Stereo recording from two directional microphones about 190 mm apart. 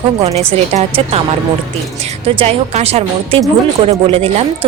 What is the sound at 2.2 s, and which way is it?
A woman's voice, 35° right (ahead or behind).